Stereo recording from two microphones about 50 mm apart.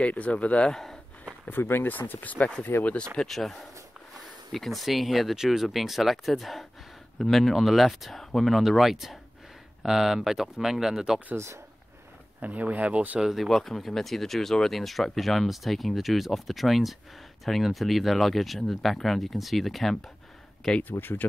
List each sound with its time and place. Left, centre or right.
0.0 s speech: left
0.7 s speech: centre
1.5 s speech: left
3.2 s speech: centre
11.3 s speech: right
12.4 s speech: right
13.2 s speech: centre
21.0 s speech: left